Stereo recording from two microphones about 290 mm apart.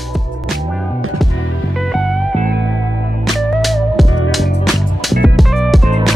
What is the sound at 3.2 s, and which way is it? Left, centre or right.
Music, centre.